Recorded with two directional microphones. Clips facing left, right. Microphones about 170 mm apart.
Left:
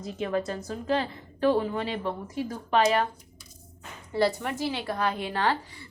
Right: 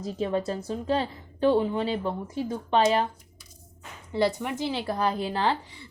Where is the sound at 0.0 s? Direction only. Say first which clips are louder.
Right 1 dB; 30° right (ahead or behind).